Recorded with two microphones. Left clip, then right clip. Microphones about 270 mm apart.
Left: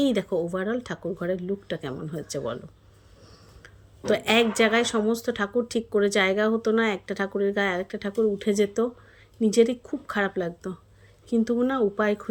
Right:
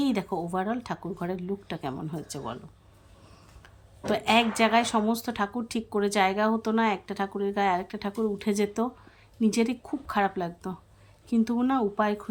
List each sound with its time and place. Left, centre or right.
0.0 s a woman's voice: centre
3.6 s a woman's voice: centre